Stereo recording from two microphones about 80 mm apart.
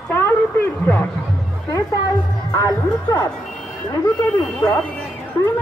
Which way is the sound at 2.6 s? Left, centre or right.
Left.